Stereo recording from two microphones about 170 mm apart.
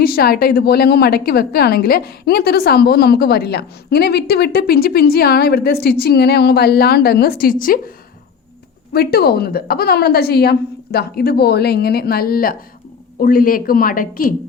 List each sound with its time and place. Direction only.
0.0 s a woman's voice: 65° left (ahead or behind)
8.9 s a woman's voice: 65° left (ahead or behind)